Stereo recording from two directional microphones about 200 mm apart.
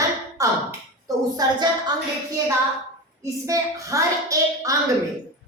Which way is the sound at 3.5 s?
15° right (ahead or behind).